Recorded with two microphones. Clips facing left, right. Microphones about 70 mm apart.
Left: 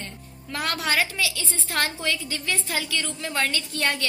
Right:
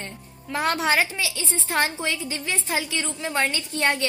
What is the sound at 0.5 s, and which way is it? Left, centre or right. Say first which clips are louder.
A woman's voice: right 3 dB; right.